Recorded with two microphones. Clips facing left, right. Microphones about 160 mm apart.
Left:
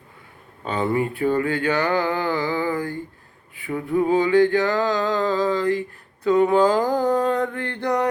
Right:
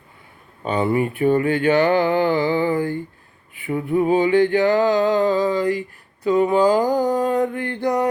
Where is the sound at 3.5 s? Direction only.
20° right (ahead or behind).